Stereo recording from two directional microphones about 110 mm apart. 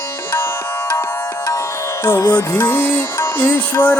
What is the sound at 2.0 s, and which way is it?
Music, 25° left (ahead or behind).